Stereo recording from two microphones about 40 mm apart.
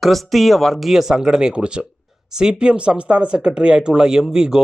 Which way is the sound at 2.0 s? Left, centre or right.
Centre.